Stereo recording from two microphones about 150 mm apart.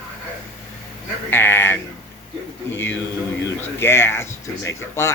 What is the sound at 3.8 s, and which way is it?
Speech, 15° left (ahead or behind).